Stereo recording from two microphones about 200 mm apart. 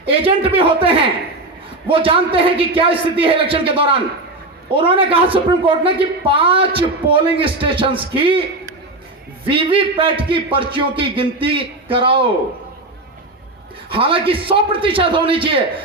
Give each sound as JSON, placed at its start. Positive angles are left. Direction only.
{"t": 0.0, "sound": "speech", "side_deg": -25}
{"t": 1.9, "sound": "speech", "side_deg": -25}
{"t": 9.5, "sound": "speech", "side_deg": -25}
{"t": 13.9, "sound": "speech", "side_deg": -25}